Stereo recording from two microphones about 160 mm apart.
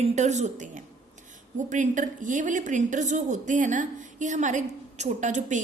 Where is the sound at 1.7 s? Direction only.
50° right (ahead or behind).